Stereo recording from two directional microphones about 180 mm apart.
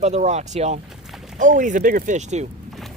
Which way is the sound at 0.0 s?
35° right (ahead or behind).